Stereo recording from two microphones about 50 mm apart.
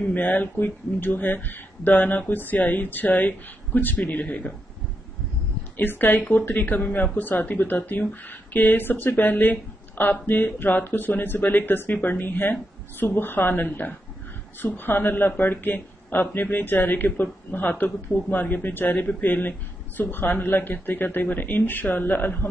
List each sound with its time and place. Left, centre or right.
0.1 s speech: left
5.8 s speech: left